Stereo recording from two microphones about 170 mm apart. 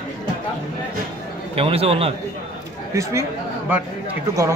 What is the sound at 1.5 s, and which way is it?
Speech, 35° right (ahead or behind).